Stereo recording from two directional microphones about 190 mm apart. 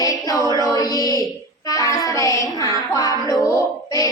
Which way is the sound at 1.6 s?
20° left (ahead or behind).